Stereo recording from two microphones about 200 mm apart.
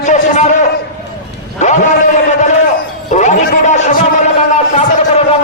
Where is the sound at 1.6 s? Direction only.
35° left (ahead or behind).